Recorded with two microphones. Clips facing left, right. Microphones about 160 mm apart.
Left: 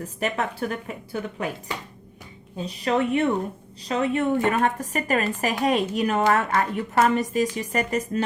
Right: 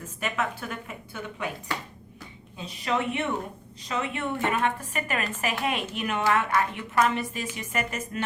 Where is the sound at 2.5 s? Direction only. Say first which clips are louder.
Left 5 dB; 40° left (ahead or behind).